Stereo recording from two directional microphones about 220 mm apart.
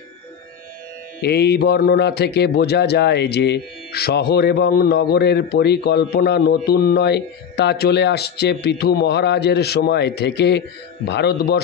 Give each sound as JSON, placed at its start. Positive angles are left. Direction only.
{"t": 1.2, "sound": "speech", "side_deg": 45}